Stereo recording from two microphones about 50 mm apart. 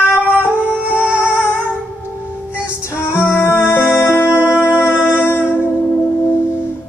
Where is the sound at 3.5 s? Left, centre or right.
Left.